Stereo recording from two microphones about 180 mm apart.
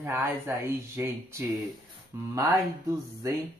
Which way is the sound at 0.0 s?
15° right (ahead or behind).